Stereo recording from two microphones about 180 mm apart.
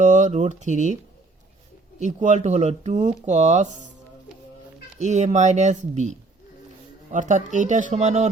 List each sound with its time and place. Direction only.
0.0 s speech: 45° right (ahead or behind)
2.0 s speech: 40° right (ahead or behind)
4.9 s speech: 40° right (ahead or behind)